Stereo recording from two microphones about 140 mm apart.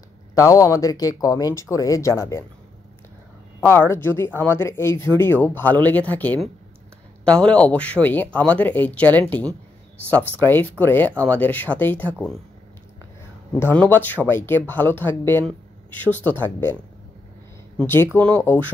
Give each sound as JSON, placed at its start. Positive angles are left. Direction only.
{"t": 0.3, "sound": "speech", "side_deg": 25}
{"t": 3.6, "sound": "speech", "side_deg": 15}
{"t": 10.4, "sound": "speech", "side_deg": 15}
{"t": 13.6, "sound": "speech", "side_deg": 15}
{"t": 17.7, "sound": "speech", "side_deg": 15}